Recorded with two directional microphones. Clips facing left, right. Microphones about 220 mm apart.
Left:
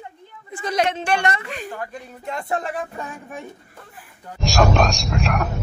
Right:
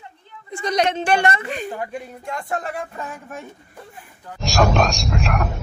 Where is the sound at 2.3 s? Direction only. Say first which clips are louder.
Left 2 dB; 20° left (ahead or behind).